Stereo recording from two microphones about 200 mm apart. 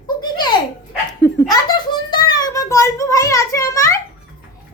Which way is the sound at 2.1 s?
20° left (ahead or behind).